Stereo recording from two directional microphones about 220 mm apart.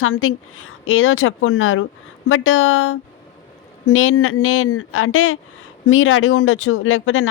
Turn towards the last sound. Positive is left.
turn(degrees=65)  # may be behind; listen again after turning